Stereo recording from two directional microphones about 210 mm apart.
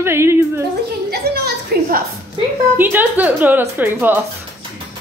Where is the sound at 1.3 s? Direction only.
45° right (ahead or behind).